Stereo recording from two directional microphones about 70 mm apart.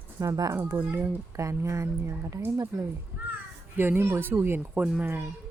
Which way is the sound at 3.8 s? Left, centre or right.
Right.